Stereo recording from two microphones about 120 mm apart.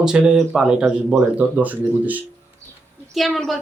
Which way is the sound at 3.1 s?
Centre (ahead or behind).